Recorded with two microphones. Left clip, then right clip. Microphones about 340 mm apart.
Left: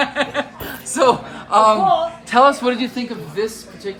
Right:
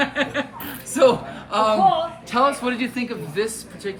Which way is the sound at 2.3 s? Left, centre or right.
Left.